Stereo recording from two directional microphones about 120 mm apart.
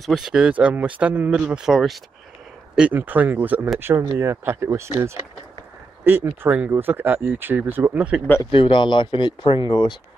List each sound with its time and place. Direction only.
0.0 s speech: centre (ahead or behind)
8.5 s speech: 45° left (ahead or behind)